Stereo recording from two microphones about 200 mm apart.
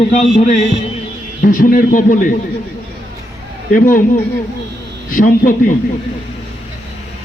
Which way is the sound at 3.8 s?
45° left (ahead or behind).